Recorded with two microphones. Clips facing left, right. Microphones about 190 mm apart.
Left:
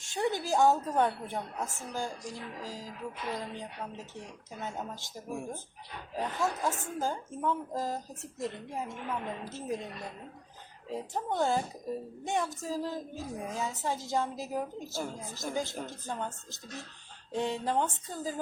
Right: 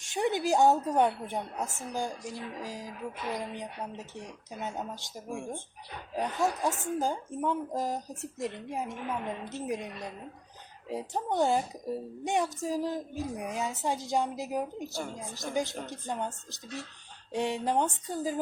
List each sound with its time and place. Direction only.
0.0 s a woman's voice: 20° right (ahead or behind)